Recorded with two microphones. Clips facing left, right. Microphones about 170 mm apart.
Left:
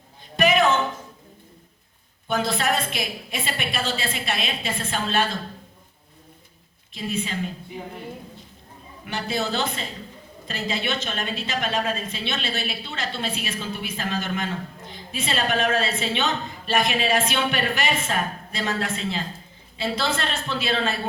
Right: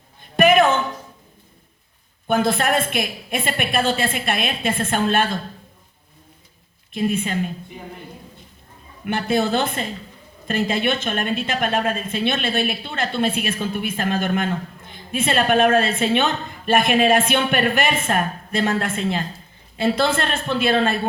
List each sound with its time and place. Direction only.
0.3 s a sound: 55° right (ahead or behind)
2.2 s a woman's voice: 55° right (ahead or behind)
6.9 s a woman's voice: 55° right (ahead or behind)
9.0 s a woman's voice: 55° right (ahead or behind)